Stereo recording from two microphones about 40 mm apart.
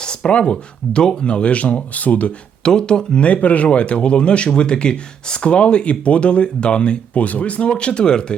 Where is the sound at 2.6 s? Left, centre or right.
Centre.